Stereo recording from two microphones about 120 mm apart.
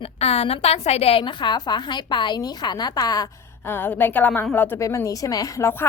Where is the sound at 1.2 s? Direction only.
40° left (ahead or behind).